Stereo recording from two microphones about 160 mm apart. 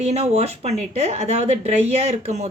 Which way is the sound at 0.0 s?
40° right (ahead or behind).